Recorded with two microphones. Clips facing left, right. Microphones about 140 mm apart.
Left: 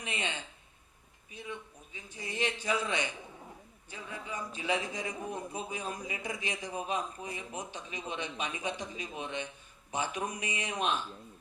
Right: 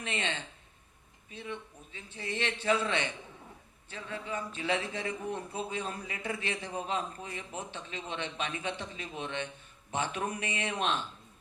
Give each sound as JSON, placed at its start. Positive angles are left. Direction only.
{"t": 0.0, "sound": "a man's voice", "side_deg": 15}